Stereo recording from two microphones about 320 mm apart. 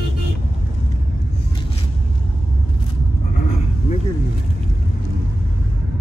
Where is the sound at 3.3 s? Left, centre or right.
Left.